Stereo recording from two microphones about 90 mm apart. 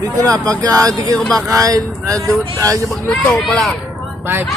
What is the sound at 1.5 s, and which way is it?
Speech, 40° right (ahead or behind).